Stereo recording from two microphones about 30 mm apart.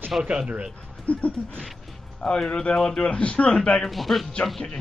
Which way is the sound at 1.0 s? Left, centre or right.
Left.